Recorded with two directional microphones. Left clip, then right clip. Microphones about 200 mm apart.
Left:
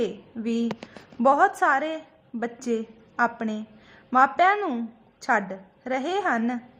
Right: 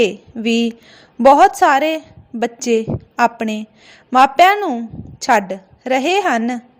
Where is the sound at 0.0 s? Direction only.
30° right (ahead or behind).